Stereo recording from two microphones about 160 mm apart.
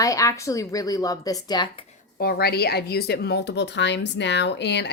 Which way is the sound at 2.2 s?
80° left.